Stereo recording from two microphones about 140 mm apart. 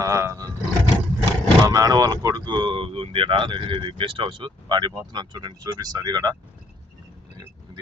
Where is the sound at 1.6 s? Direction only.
25° right (ahead or behind).